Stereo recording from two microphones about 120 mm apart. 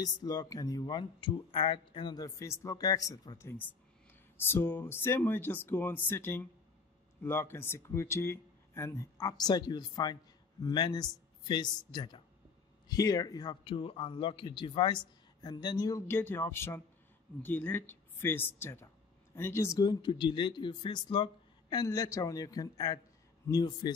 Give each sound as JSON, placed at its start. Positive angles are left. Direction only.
{"t": 0.0, "sound": "speech", "side_deg": 35}
{"t": 16.1, "sound": "speech", "side_deg": 20}